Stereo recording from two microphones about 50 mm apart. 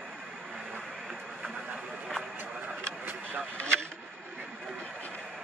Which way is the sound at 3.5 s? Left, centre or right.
Left.